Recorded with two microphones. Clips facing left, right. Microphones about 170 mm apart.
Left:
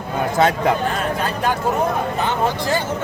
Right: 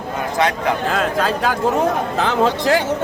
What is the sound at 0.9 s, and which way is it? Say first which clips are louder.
Speech: right 3 dB; 90° right.